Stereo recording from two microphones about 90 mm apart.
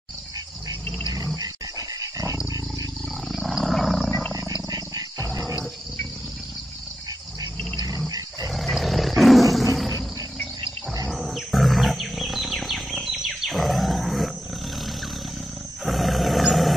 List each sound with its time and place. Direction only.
1.1 s dog: 40° right (ahead or behind)
3.3 s wild animals: 5° right (ahead or behind)
4.6 s wild animals: 40° right (ahead or behind)
8.5 s roar: centre (ahead or behind)
11.1 s wild animals: centre (ahead or behind)
15.8 s roar: centre (ahead or behind)